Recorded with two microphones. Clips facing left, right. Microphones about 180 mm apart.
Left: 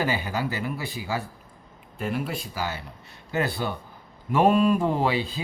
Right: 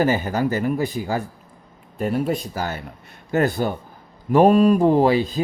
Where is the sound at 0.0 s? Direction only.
45° right (ahead or behind).